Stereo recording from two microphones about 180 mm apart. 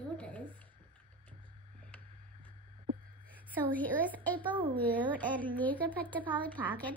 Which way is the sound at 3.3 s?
10° left (ahead or behind).